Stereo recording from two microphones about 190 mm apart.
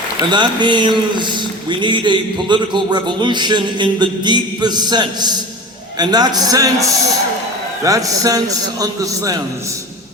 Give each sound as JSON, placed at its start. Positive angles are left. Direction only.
{"t": 0.3, "sound": "a man's voice", "side_deg": -25}